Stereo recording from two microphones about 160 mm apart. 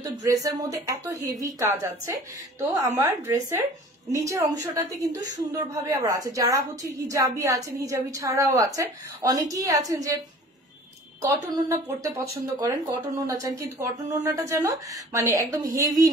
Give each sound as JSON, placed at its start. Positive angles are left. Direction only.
{"t": 0.0, "sound": "a woman's voice", "side_deg": -20}
{"t": 11.5, "sound": "a woman's voice", "side_deg": -20}